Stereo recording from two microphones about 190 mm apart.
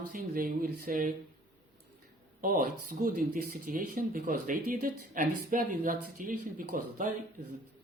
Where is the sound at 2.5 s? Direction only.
50° right (ahead or behind).